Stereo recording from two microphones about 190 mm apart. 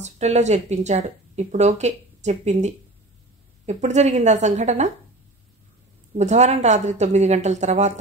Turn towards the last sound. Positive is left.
turn(degrees=-40)  # may be behind; listen again after turning